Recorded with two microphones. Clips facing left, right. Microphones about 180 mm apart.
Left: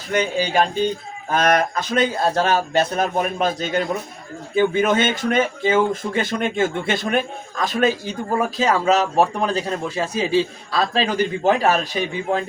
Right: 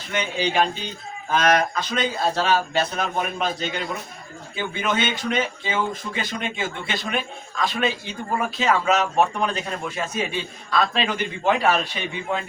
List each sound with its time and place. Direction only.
0.1 s speech: 45° left (ahead or behind)